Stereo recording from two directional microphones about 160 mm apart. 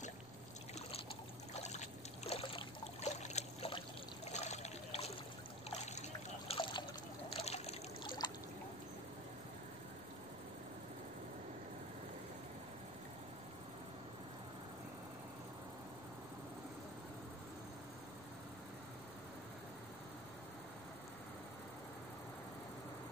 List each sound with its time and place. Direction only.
1.5 s trickle: 45° left (ahead or behind)
4.3 s a sound: 45° left (ahead or behind)
5.7 s trickle: 40° left (ahead or behind)
7.3 s water: 40° left (ahead or behind)
8.2 s trickle: 25° left (ahead or behind)